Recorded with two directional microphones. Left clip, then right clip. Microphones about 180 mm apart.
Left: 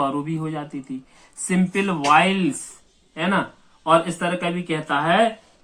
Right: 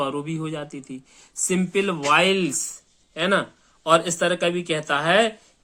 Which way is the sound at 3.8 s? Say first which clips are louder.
Even; 35° right (ahead or behind).